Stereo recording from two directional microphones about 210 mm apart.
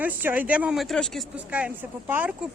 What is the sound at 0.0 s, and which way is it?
Speech, 10° right (ahead or behind).